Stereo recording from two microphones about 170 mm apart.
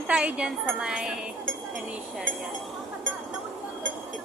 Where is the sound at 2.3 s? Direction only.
90° right.